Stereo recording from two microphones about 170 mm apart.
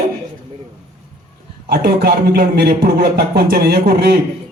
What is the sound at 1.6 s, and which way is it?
A man's voice, 70° right (ahead or behind).